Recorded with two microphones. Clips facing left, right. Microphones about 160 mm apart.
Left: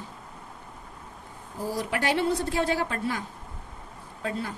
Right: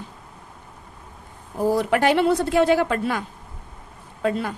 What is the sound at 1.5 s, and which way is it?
Speech, 60° right (ahead or behind).